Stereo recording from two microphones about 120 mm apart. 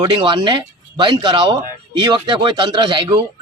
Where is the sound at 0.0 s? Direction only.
40° right (ahead or behind).